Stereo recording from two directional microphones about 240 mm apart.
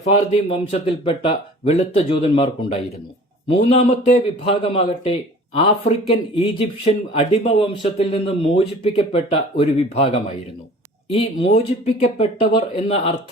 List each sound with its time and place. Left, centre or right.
0.0 s a man's voice: left